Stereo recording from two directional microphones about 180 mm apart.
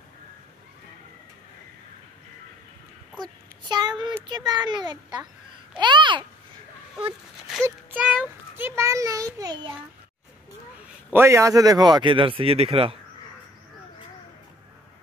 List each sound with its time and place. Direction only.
3.6 s a child's voice: 25° right (ahead or behind)
7.6 s a child's voice: 10° right (ahead or behind)
11.1 s speech: 15° right (ahead or behind); by 12.9 s 30° right (ahead or behind)